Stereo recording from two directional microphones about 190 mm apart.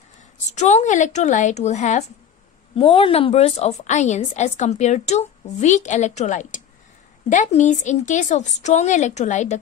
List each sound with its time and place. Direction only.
0.5 s a woman's voice: 40° left (ahead or behind)